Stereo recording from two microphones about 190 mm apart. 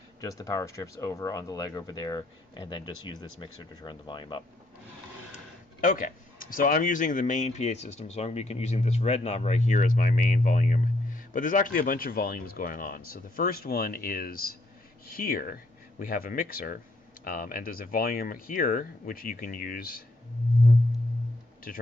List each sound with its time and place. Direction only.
0.2 s speech: 20° left (ahead or behind)
5.8 s speech: 45° left (ahead or behind)